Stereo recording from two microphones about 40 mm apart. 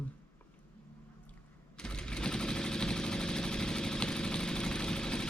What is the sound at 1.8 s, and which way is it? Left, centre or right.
Sewing machine, left.